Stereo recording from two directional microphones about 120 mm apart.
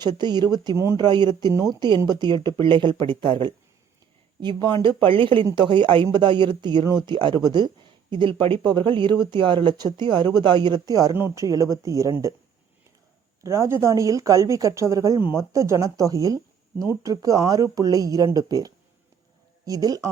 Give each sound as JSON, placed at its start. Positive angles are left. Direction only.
{"t": 0.0, "sound": "speech", "side_deg": -40}
{"t": 13.4, "sound": "speech", "side_deg": -25}